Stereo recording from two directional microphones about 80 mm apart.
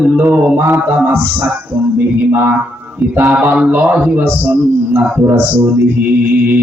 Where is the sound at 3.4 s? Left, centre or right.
Centre.